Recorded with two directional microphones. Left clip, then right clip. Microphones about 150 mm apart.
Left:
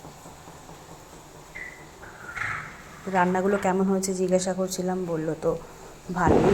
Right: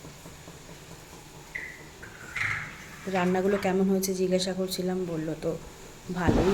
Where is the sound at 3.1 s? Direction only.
Centre (ahead or behind).